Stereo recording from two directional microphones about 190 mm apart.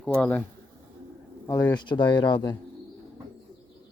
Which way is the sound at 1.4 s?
15° left (ahead or behind).